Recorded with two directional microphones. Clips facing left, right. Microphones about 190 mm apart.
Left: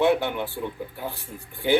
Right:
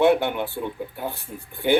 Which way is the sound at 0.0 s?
55° right (ahead or behind).